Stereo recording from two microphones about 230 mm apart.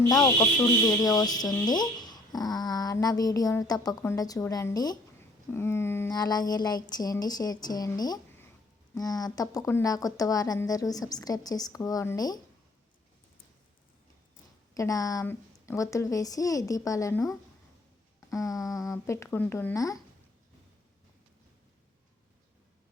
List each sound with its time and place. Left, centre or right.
0.1 s a woman's voice: centre
14.8 s a woman's voice: centre
18.3 s a woman's voice: centre